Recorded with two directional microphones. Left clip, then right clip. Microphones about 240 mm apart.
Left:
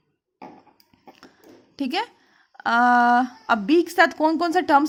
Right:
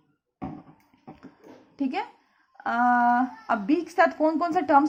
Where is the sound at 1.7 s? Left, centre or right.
Left.